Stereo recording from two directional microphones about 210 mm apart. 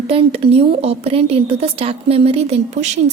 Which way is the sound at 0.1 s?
30° right (ahead or behind).